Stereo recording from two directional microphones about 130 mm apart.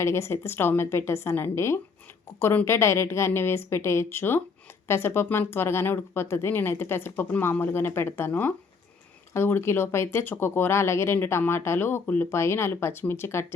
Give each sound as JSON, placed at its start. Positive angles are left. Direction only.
{"t": 0.0, "sound": "speech", "side_deg": 20}